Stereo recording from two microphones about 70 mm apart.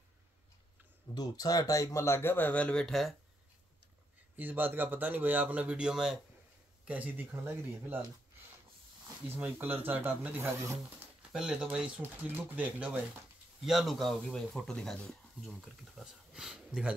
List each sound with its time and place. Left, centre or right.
1.1 s speech: left; by 2.9 s centre
2.9 s speech: centre
4.4 s speech: right
9.3 s speech: right
11.3 s speech: centre
13.6 s speech: centre
15.4 s speech: centre